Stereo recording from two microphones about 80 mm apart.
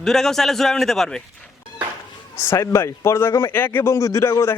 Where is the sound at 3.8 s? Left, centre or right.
Left.